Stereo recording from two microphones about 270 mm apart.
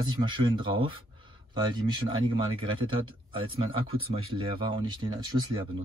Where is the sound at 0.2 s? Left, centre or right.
Centre.